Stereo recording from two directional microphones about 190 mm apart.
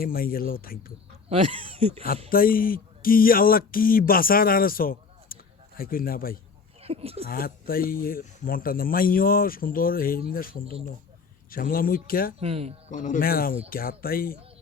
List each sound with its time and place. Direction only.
0.0 s speech: 50° left (ahead or behind)
1.3 s speech: 30° right (ahead or behind)
2.3 s speech: 50° left (ahead or behind)
6.8 s speech: 30° right (ahead or behind)
7.3 s speech: 50° left (ahead or behind)
12.4 s speech: 35° right (ahead or behind)
12.9 s speech: 40° left (ahead or behind)